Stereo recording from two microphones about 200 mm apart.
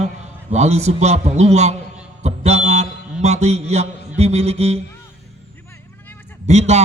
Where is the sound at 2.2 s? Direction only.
35° right (ahead or behind).